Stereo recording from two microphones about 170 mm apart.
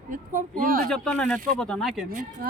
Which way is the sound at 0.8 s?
5° left (ahead or behind).